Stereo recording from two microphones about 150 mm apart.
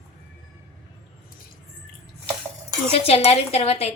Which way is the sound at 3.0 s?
45° left (ahead or behind).